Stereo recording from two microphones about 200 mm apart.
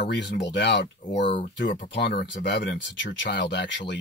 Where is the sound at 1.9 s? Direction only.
50° left (ahead or behind).